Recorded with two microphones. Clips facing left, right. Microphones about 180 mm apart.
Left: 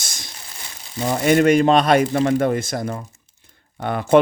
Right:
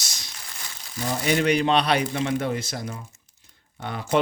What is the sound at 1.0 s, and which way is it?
Speech, 55° left (ahead or behind).